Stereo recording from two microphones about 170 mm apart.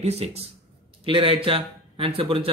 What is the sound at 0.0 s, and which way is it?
Speech, 40° right (ahead or behind).